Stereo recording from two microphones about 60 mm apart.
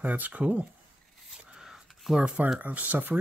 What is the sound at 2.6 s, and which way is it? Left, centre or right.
Speech, right.